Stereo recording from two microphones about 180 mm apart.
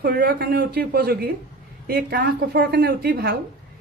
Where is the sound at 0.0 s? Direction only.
60° right (ahead or behind).